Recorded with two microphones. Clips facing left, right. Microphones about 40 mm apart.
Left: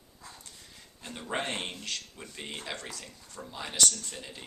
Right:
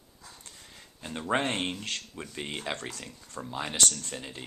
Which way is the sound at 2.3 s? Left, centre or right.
Centre.